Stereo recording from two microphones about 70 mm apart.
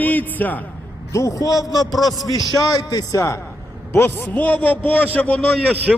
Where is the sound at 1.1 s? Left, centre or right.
Left.